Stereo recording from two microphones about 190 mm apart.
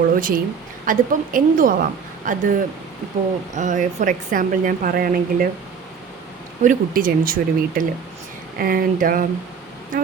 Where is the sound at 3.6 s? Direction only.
40° right (ahead or behind).